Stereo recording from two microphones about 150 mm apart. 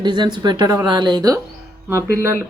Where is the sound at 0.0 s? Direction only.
30° right (ahead or behind).